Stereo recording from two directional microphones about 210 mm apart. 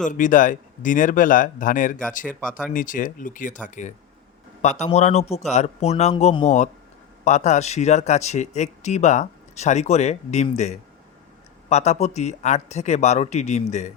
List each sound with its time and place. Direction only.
0.0 s speech: 40° left (ahead or behind)